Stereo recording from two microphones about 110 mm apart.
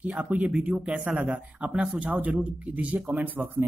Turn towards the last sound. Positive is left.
turn(degrees=-15)  # may be behind; listen again after turning